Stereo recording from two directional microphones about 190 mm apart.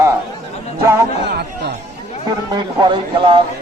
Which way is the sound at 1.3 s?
60° right (ahead or behind).